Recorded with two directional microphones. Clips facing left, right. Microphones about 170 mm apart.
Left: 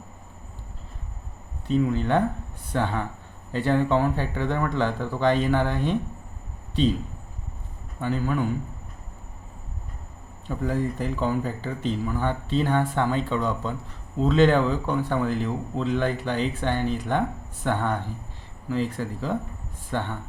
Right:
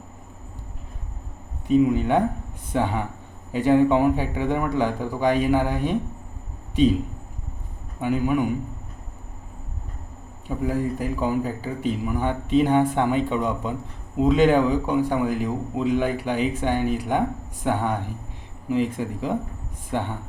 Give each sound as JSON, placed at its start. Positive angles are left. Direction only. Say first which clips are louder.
{"t": 1.6, "sound": "speech", "louder": "right 5 dB", "side_deg": -15}
{"t": 8.0, "sound": "speech", "louder": "right 4 dB", "side_deg": -15}
{"t": 10.4, "sound": "speech", "louder": "right 2 dB", "side_deg": -10}